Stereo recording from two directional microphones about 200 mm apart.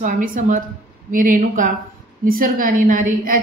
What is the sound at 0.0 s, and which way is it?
A woman's voice, 40° right (ahead or behind).